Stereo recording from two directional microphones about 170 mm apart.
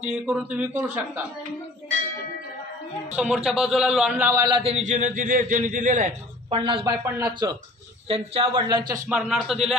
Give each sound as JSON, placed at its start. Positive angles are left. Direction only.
{"t": 0.0, "sound": "a man's voice", "side_deg": -10}
{"t": 3.4, "sound": "a man's voice", "side_deg": 0}
{"t": 4.3, "sound": "a man's voice", "side_deg": -25}
{"t": 6.5, "sound": "speech", "side_deg": -30}
{"t": 6.9, "sound": "a man's voice", "side_deg": -20}
{"t": 8.1, "sound": "a man's voice", "side_deg": -35}
{"t": 9.1, "sound": "a man's voice", "side_deg": -5}